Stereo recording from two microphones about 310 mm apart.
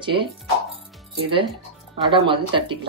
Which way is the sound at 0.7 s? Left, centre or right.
Centre.